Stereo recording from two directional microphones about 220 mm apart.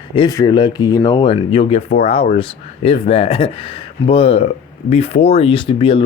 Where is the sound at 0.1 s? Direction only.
20° left (ahead or behind).